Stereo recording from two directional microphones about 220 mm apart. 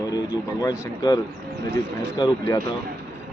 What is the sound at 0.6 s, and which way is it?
Speech, 15° left (ahead or behind).